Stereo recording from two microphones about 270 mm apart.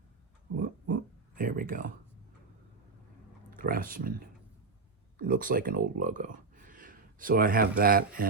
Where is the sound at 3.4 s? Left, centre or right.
Right.